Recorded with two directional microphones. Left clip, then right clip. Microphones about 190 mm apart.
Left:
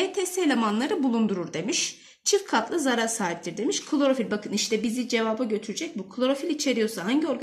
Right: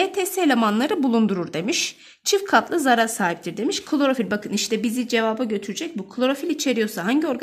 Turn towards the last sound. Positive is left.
turn(degrees=-55)  # may be behind; listen again after turning